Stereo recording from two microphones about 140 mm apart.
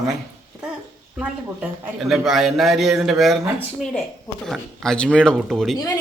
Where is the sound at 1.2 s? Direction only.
5° right (ahead or behind).